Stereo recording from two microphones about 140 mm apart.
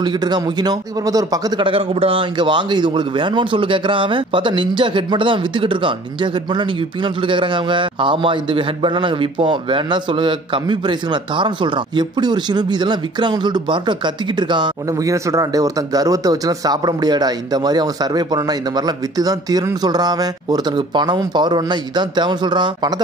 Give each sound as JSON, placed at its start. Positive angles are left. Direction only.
{"t": 0.0, "sound": "speech", "side_deg": -30}
{"t": 1.7, "sound": "a man's voice", "side_deg": -40}
{"t": 7.2, "sound": "a man's voice", "side_deg": -35}